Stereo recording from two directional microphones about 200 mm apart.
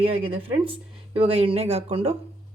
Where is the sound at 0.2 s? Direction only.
25° right (ahead or behind).